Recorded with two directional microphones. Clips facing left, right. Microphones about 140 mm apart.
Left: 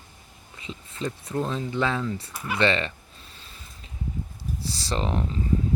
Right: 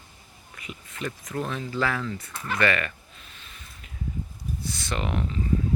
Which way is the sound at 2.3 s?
5° left (ahead or behind).